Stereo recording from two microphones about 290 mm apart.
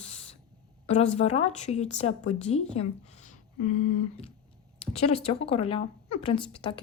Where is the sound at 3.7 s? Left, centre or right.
Left.